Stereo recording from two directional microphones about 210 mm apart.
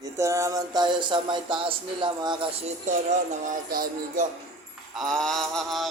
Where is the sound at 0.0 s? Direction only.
15° right (ahead or behind); by 3.2 s 30° right (ahead or behind).